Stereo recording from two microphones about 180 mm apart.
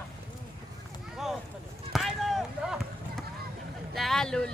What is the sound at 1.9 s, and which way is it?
Run, centre (ahead or behind).